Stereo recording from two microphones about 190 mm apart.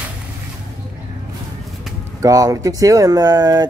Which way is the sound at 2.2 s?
15° right (ahead or behind).